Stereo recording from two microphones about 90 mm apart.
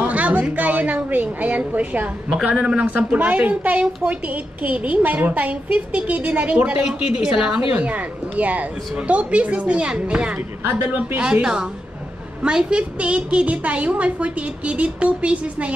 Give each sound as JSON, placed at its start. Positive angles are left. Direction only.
{"t": 0.0, "sound": "a woman's voice", "side_deg": -15}